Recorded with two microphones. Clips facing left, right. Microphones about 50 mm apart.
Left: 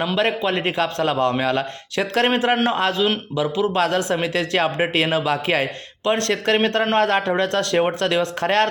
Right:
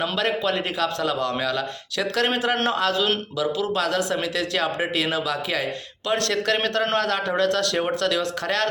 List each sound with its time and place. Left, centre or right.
0.2 s a man's voice: left